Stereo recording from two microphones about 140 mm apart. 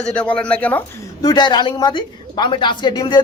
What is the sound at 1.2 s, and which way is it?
A woman's voice, 30° left (ahead or behind).